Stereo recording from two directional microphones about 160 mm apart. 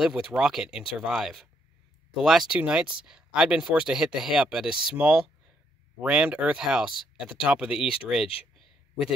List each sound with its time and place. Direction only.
0.0 s speech: 5° right (ahead or behind)